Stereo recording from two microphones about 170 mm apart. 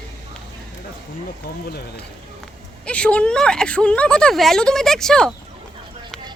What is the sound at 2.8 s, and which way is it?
Speech, 5° left (ahead or behind).